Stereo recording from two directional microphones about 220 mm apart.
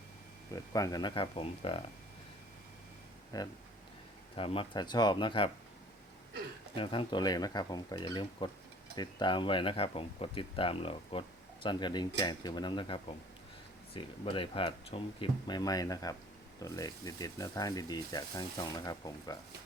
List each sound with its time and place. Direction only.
0.5 s speech: 15° left (ahead or behind)
3.3 s speech: 15° left (ahead or behind)
6.7 s speech: 25° left (ahead or behind)